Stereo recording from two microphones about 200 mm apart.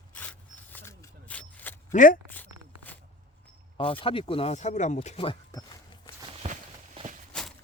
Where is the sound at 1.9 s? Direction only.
40° left (ahead or behind).